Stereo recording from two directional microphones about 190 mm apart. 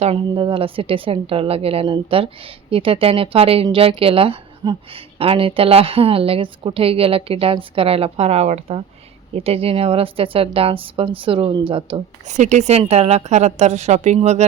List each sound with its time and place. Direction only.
0.0 s a woman's voice: 30° right (ahead or behind)